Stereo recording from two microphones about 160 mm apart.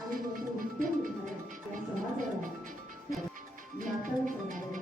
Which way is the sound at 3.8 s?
55° right (ahead or behind).